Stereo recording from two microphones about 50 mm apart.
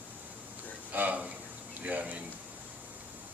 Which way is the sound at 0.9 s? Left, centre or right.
Right.